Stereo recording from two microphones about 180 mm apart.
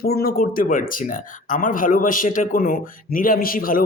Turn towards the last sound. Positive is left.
turn(degrees=50)  # may be behind; listen again after turning